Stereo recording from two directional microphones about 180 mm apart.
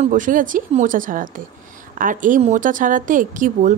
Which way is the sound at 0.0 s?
45° right (ahead or behind).